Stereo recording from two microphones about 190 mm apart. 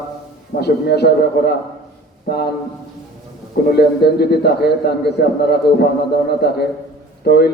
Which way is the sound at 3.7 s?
55° left (ahead or behind).